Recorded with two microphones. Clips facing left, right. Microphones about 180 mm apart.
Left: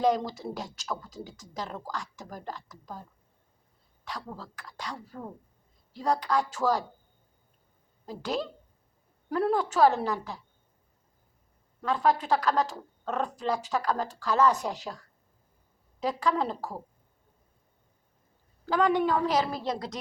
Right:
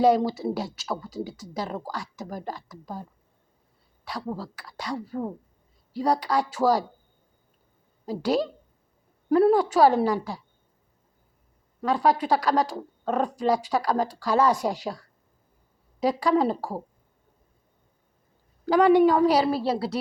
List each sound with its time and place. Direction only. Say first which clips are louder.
0.0 s speech: right 6 dB; 10° right (ahead or behind)
4.4 s speech: right 5 dB; 10° right (ahead or behind)
9.3 s speech: right 8 dB; 10° right (ahead or behind)
11.8 s speech: right 3 dB; 10° right (ahead or behind)
18.6 s speech: right 8 dB; 10° right (ahead or behind)
19.5 s a woman's voice: right 8 dB; 30° right (ahead or behind)
19.7 s speech: right 8 dB; 10° right (ahead or behind)